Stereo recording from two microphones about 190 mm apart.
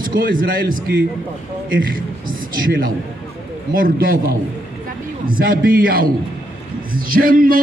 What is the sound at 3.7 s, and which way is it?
Speech, 50° right (ahead or behind).